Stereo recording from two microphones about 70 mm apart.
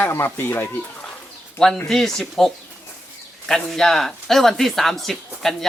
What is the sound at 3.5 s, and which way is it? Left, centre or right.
Speech, centre.